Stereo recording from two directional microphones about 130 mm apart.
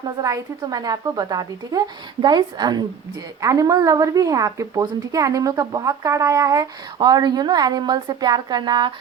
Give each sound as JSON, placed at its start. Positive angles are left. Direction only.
{"t": 0.2, "sound": "a woman's voice", "side_deg": -25}